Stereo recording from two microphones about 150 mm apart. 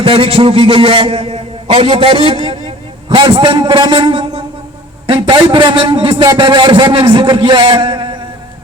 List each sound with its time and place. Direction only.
0.0 s a man's voice: 35° right (ahead or behind)